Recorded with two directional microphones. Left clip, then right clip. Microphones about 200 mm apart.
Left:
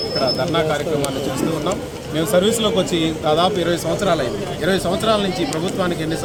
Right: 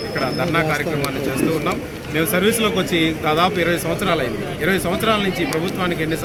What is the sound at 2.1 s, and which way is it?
Speech, 15° left (ahead or behind).